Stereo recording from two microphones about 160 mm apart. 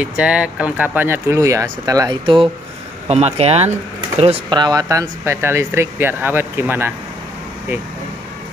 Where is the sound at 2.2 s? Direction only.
30° right (ahead or behind).